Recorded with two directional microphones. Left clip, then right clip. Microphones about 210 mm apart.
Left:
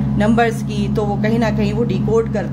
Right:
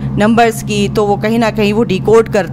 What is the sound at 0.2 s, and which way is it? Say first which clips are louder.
A woman's voice: right 6 dB; 30° right (ahead or behind).